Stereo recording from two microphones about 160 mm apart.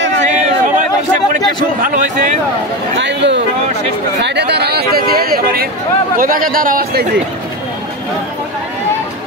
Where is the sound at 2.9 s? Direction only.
90° right; by 7.0 s 60° right (ahead or behind).